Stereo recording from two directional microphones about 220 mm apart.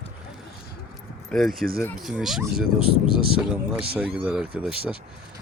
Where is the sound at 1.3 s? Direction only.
Centre (ahead or behind).